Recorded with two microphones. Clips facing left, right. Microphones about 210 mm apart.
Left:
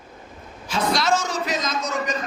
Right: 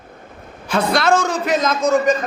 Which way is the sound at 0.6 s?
60° right (ahead or behind).